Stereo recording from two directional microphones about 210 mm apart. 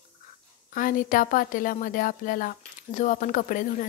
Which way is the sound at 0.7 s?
40° left (ahead or behind).